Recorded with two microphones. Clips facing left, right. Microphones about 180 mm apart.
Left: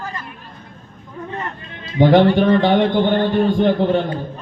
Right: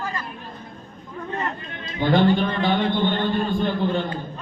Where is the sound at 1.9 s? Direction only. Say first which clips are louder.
Left 6 dB; 80° left.